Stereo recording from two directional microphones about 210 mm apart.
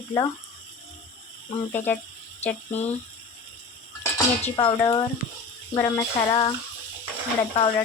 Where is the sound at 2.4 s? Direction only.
30° left (ahead or behind).